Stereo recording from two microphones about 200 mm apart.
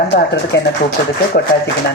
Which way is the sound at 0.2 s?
60° left (ahead or behind).